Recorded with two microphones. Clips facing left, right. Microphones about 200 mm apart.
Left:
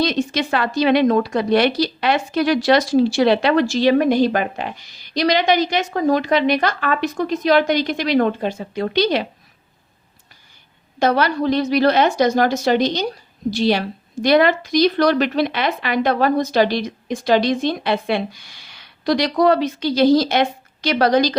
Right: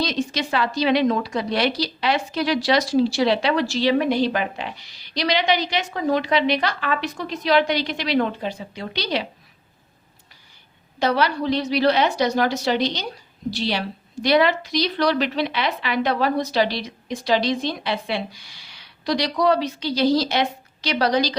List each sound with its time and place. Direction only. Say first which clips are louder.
0.0 s a woman's voice: left 4 dB; 55° left (ahead or behind)
11.0 s a woman's voice: left 4 dB; 50° left (ahead or behind)